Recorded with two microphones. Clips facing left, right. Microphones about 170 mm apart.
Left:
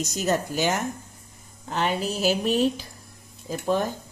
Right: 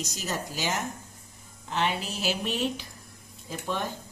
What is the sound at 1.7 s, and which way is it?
A woman's voice, 40° left (ahead or behind).